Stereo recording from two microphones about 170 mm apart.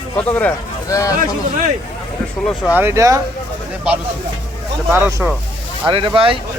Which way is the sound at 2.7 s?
15° right (ahead or behind).